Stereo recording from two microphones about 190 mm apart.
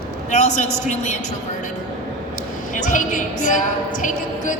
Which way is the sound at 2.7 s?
40° left (ahead or behind).